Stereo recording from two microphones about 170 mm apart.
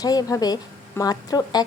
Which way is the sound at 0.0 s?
20° left (ahead or behind).